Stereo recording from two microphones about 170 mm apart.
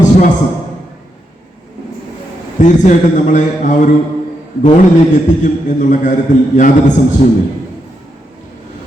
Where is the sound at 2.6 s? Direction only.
45° left (ahead or behind).